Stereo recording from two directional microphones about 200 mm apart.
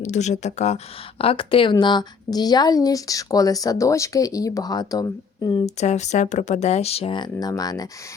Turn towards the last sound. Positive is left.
turn(degrees=20)  # may be behind; listen again after turning